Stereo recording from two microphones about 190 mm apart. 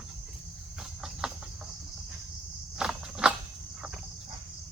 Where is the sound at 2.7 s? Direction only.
5° right (ahead or behind).